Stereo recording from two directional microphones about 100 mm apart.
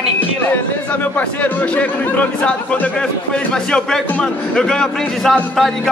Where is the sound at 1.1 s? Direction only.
15° left (ahead or behind).